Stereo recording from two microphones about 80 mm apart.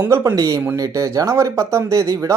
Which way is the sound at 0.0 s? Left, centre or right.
Right.